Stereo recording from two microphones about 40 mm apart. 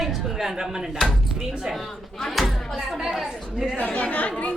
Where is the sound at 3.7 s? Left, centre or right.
Left.